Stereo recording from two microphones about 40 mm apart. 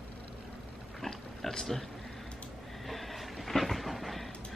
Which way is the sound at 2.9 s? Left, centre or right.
Centre.